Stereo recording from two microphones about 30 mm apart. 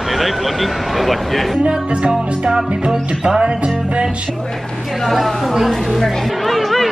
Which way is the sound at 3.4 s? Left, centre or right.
Right.